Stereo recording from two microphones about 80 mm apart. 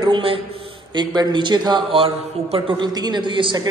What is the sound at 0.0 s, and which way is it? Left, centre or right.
Speech, right.